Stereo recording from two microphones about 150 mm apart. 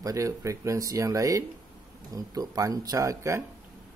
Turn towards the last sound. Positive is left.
turn(degrees=-20)  # may be behind; listen again after turning